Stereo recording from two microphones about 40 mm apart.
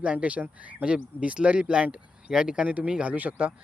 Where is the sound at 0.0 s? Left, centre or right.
Right.